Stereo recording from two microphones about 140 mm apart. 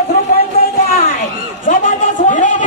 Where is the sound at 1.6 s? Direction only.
70° left (ahead or behind).